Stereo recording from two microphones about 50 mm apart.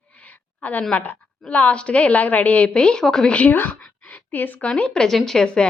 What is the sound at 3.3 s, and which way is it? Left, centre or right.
Speech, left.